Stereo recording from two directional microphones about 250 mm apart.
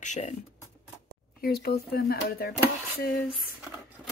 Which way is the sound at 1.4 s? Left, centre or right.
Left.